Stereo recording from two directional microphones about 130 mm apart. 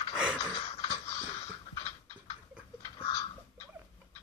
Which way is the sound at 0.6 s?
45° left (ahead or behind).